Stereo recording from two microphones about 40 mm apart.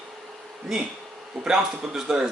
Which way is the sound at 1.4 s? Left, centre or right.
Centre.